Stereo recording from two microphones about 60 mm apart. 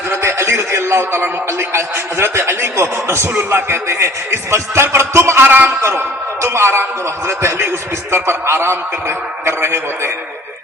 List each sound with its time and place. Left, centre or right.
0.1 s a man's voice: right
5.6 s music: right
7.3 s a man's voice: right